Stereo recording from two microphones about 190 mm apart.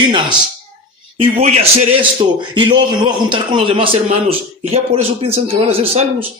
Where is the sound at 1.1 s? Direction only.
30° right (ahead or behind).